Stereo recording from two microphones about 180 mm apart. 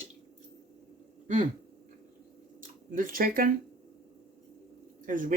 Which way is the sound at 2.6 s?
50° right (ahead or behind).